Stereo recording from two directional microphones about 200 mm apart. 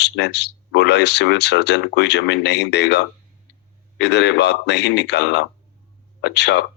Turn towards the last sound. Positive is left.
turn(degrees=60)  # may be behind; listen again after turning